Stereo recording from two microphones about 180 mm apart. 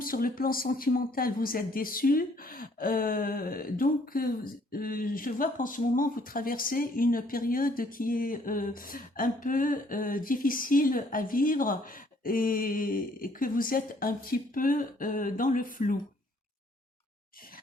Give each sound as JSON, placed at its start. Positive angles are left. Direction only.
{"t": 0.0, "sound": "speech", "side_deg": 50}